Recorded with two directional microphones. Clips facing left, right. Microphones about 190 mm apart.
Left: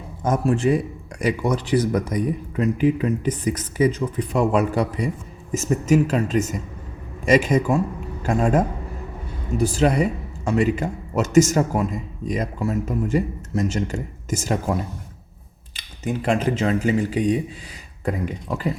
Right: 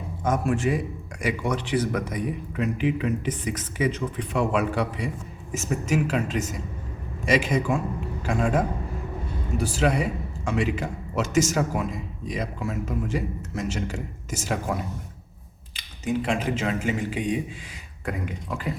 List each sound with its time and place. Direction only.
0.3 s speech: 35° left (ahead or behind)
16.0 s speech: 40° left (ahead or behind)